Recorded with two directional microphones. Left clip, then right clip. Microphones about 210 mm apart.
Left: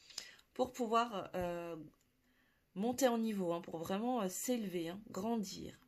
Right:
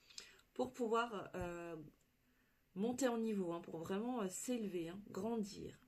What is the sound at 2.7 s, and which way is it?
Speech, 45° left (ahead or behind).